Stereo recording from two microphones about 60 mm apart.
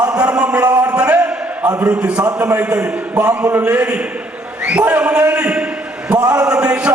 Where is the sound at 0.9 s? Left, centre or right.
Right.